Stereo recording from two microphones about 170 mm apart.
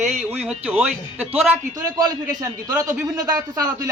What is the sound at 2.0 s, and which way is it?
Speech, 20° right (ahead or behind).